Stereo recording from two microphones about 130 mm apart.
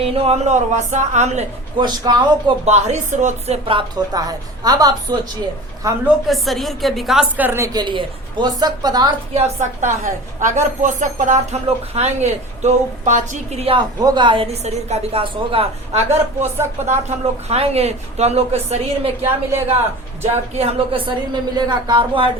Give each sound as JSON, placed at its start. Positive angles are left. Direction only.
{"t": 0.0, "sound": "speech", "side_deg": -50}
{"t": 1.8, "sound": "speech", "side_deg": -35}
{"t": 2.6, "sound": "a woman's voice", "side_deg": -60}
{"t": 6.2, "sound": "a woman's voice", "side_deg": 0}
{"t": 7.3, "sound": "a woman's voice", "side_deg": -15}
{"t": 7.7, "sound": "speech", "side_deg": -35}
{"t": 9.3, "sound": "speech", "side_deg": -65}
{"t": 13.7, "sound": "a woman's voice", "side_deg": -35}
{"t": 19.2, "sound": "a woman's voice", "side_deg": -20}
{"t": 20.6, "sound": "speech", "side_deg": -50}